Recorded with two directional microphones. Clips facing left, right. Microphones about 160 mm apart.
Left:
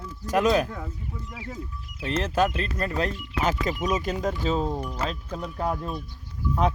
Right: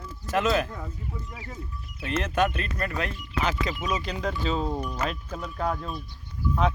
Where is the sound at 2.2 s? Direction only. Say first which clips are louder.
Left 1 dB; 30° left (ahead or behind).